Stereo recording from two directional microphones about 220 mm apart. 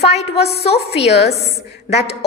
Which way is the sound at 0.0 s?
30° left (ahead or behind).